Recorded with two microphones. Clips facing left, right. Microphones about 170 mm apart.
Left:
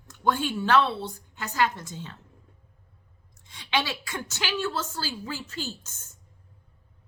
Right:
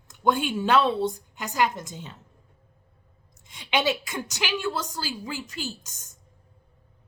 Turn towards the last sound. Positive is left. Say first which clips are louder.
# right 1 dB
turn(degrees=-15)  # may be behind; listen again after turning